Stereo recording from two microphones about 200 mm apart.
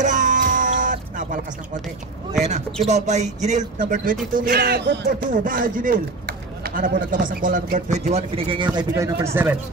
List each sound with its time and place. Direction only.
0.0 s music: 40° right (ahead or behind)
2.4 s speech: 35° right (ahead or behind)
4.5 s speech: 50° right (ahead or behind)
5.3 s speech: 40° right (ahead or behind); by 9.6 s 10° right (ahead or behind)